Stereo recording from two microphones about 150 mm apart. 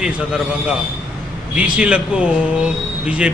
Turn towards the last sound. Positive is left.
turn(degrees=-5)  # may be behind; listen again after turning